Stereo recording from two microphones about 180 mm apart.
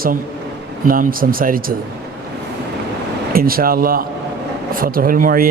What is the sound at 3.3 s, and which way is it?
Speech, 55° right (ahead or behind).